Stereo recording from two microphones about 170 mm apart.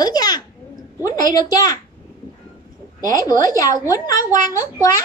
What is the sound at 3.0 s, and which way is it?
Speech, 20° left (ahead or behind).